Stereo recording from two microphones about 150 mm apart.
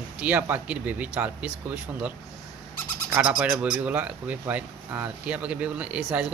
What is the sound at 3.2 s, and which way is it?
Speech, 5° right (ahead or behind).